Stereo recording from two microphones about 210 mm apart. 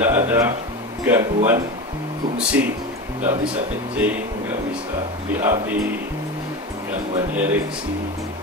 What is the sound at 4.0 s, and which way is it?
Speech, 5° right (ahead or behind).